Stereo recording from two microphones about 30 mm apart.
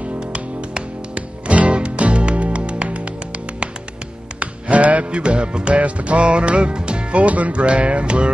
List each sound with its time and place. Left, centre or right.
0.3 s music: right
4.4 s music: right
5.2 s music: right
5.8 s music: right